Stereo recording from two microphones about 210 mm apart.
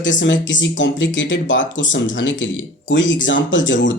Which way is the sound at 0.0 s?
60° left (ahead or behind).